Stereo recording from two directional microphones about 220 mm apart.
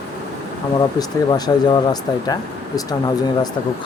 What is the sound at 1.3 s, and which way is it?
Speech, 20° left (ahead or behind).